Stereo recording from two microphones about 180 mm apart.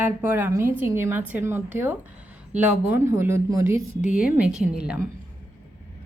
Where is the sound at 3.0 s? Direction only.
15° right (ahead or behind).